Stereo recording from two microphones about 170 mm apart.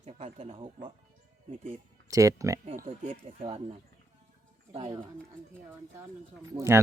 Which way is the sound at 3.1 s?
35° right (ahead or behind).